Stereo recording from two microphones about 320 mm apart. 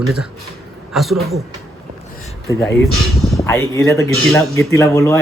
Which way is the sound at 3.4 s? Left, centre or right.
Centre.